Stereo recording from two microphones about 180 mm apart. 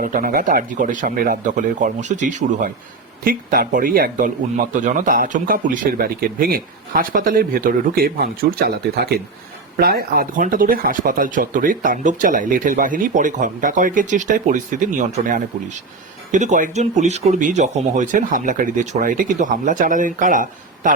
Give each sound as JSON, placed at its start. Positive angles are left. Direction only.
{"t": 0.0, "sound": "speech", "side_deg": -50}
{"t": 3.2, "sound": "speech", "side_deg": -50}